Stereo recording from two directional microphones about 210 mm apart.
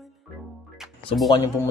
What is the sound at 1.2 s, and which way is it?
Speech, 20° left (ahead or behind).